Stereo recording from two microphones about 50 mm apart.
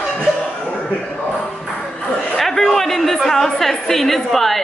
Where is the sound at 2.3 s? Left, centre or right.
Centre.